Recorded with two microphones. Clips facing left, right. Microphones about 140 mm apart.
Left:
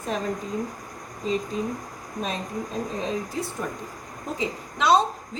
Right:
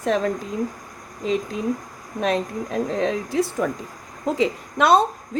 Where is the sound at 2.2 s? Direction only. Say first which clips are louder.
Right 7 dB; 80° right.